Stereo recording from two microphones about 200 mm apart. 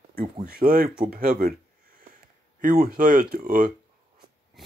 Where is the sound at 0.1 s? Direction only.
45° right (ahead or behind).